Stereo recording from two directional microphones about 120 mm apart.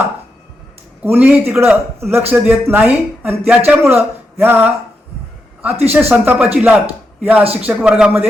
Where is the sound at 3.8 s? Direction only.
20° right (ahead or behind).